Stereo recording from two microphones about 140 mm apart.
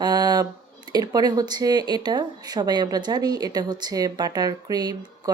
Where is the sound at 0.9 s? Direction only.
25° right (ahead or behind).